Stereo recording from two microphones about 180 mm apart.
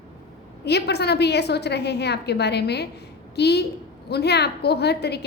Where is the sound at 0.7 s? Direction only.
65° left (ahead or behind).